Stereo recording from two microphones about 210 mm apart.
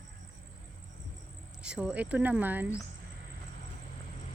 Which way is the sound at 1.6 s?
5° right (ahead or behind).